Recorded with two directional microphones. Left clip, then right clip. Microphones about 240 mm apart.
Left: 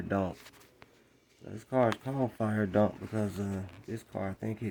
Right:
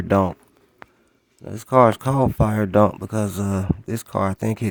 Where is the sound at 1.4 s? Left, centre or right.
Right.